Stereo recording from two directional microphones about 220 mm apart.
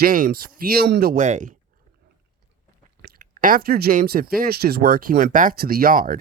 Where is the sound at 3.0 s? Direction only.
40° right (ahead or behind).